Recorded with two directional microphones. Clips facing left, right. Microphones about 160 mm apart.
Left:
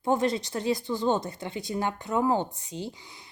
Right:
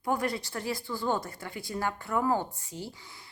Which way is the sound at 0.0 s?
25° left (ahead or behind).